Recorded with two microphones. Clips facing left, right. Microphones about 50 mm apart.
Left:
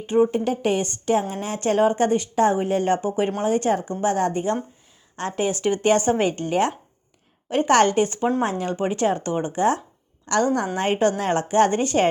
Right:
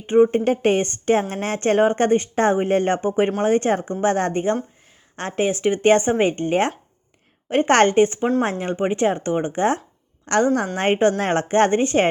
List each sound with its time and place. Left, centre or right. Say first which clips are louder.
0.0 s speech: right 4 dB; right